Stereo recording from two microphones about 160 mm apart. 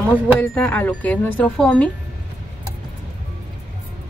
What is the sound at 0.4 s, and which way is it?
Speech, 10° left (ahead or behind).